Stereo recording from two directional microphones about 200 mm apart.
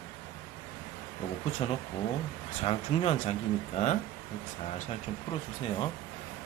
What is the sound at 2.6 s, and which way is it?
Speech, 30° left (ahead or behind).